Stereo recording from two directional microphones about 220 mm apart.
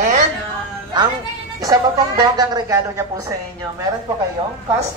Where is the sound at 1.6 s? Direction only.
15° right (ahead or behind).